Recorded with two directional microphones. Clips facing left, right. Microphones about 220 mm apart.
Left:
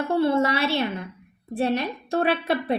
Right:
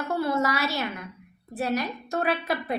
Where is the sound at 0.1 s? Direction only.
30° left (ahead or behind).